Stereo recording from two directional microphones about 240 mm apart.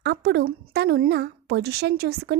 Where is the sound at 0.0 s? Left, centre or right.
Right.